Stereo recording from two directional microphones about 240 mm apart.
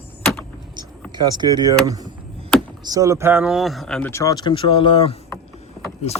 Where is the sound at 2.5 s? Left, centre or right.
Centre.